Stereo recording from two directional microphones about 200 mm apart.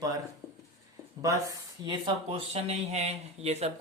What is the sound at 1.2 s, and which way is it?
Speech, 15° right (ahead or behind).